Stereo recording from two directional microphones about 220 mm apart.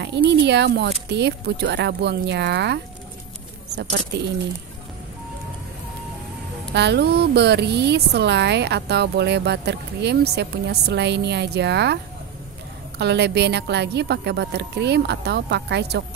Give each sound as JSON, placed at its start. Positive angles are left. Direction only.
{"t": 0.0, "sound": "speech", "side_deg": -50}
{"t": 6.7, "sound": "speech", "side_deg": -50}
{"t": 13.0, "sound": "speech", "side_deg": -50}